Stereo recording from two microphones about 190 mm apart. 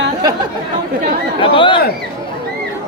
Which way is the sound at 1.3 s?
25° left (ahead or behind).